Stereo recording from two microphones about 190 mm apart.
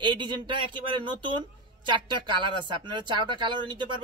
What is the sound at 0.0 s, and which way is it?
Speech, 25° right (ahead or behind).